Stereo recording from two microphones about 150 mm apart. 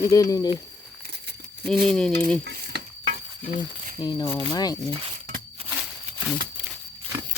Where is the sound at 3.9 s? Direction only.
30° left (ahead or behind).